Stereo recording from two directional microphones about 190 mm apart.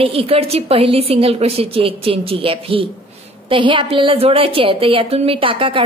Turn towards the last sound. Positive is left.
turn(degrees=-30)  # may be behind; listen again after turning